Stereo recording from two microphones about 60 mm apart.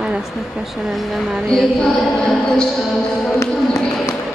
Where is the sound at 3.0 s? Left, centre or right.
Centre.